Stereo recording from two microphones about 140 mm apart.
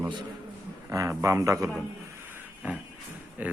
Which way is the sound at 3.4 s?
10° right (ahead or behind).